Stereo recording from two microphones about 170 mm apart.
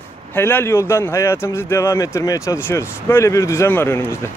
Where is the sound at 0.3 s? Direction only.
10° left (ahead or behind).